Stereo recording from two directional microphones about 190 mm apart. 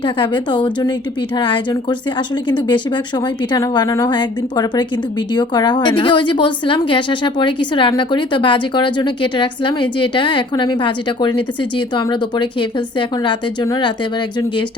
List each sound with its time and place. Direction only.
0.0 s a woman's voice: 25° left (ahead or behind)